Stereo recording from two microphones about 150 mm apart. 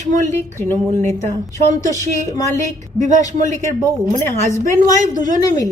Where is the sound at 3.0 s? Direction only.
55° right (ahead or behind).